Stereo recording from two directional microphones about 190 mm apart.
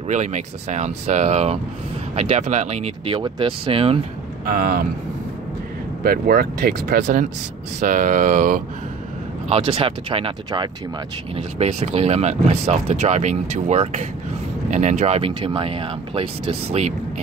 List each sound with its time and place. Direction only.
0.1 s speech: 40° right (ahead or behind)
4.5 s speech: 50° right (ahead or behind)
6.0 s speech: 50° right (ahead or behind)
9.5 s speech: 30° right (ahead or behind)